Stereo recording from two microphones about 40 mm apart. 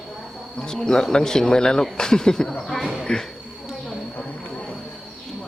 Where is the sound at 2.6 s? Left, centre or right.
Centre.